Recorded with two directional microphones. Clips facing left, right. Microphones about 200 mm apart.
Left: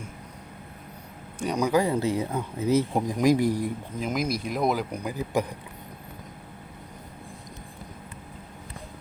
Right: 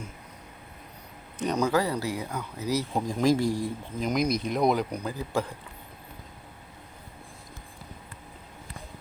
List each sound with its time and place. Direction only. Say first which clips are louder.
1.4 s speech: left 2 dB; 10° left (ahead or behind)
4.0 s speech: right 2 dB; 5° left (ahead or behind)